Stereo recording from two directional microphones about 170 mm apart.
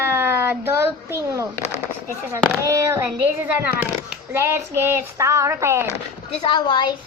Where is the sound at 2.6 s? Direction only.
20° right (ahead or behind).